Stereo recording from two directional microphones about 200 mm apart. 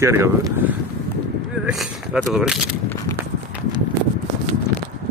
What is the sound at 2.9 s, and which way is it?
Walk, 15° left (ahead or behind).